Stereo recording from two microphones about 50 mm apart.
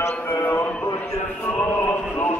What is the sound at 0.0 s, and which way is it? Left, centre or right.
Music, left.